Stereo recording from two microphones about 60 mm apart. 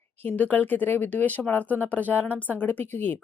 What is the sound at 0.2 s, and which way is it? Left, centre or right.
A woman's voice, left.